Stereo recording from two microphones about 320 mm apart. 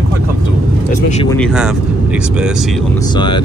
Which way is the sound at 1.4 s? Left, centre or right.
Centre.